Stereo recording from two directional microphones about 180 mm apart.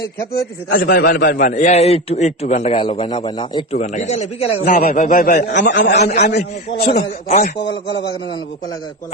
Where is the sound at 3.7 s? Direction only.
40° left (ahead or behind).